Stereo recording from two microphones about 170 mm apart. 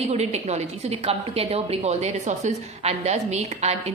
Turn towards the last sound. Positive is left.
turn(degrees=-40)  # may be behind; listen again after turning